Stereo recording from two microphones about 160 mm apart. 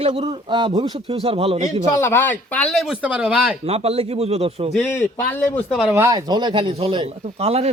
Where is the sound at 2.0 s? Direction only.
15° left (ahead or behind); by 3.5 s 5° right (ahead or behind).